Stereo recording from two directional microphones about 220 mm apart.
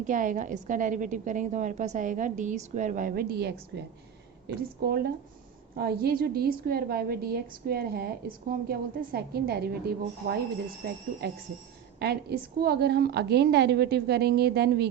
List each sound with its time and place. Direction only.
0.1 s a woman's voice: 35° right (ahead or behind)
11.9 s a woman's voice: 45° right (ahead or behind)